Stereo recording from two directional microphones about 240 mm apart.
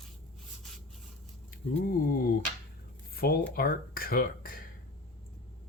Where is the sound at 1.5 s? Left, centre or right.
Left.